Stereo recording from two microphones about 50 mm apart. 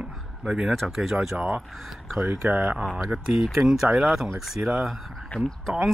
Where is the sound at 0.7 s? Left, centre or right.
Centre.